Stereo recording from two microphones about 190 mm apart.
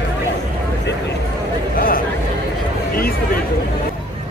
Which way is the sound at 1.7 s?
50° left (ahead or behind).